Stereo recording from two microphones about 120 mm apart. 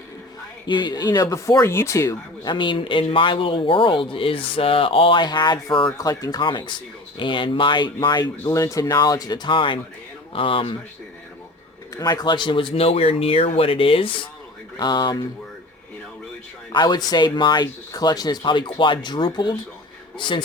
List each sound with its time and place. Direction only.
0.7 s speech: 40° left (ahead or behind)
2.5 s speech: 45° left (ahead or behind)
6.0 s speech: 30° left (ahead or behind); by 10.8 s 50° left (ahead or behind)
11.9 s speech: 35° left (ahead or behind); by 14.3 s 50° left (ahead or behind)
14.8 s speech: 40° left (ahead or behind)
16.7 s speech: 35° left (ahead or behind)